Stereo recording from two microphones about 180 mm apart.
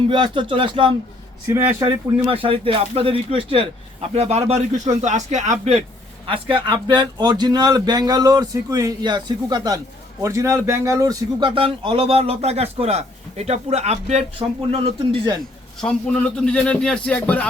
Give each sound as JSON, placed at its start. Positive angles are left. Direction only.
{"t": 0.1, "sound": "speech", "side_deg": -25}
{"t": 1.5, "sound": "speech", "side_deg": -15}
{"t": 2.1, "sound": "speech", "side_deg": -30}
{"t": 6.2, "sound": "speech", "side_deg": -30}
{"t": 15.8, "sound": "speech", "side_deg": 5}